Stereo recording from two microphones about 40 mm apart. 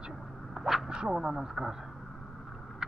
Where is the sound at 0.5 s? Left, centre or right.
Centre.